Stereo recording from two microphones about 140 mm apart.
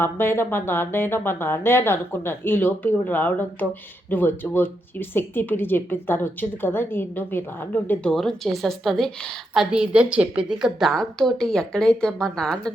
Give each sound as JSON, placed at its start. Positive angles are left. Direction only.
{"t": 0.0, "sound": "a woman's voice", "side_deg": 15}